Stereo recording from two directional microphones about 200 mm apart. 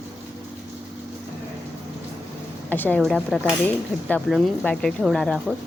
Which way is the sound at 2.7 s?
10° left (ahead or behind).